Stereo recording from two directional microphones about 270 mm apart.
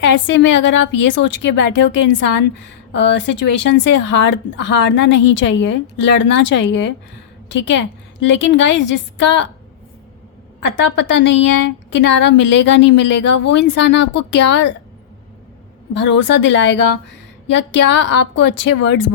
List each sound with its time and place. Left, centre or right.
0.0 s a woman's voice: left
10.8 s a woman's voice: left
16.0 s a woman's voice: left